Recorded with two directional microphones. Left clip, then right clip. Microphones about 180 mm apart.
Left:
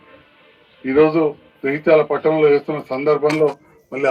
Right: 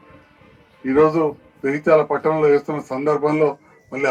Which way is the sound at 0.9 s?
50° left (ahead or behind).